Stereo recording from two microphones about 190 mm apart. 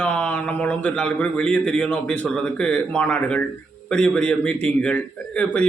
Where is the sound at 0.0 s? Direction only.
5° left (ahead or behind).